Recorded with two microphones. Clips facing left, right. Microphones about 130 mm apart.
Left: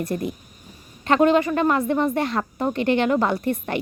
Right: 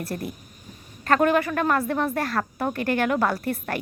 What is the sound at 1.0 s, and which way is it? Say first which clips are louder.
A woman's voice: left 3 dB; 20° left (ahead or behind).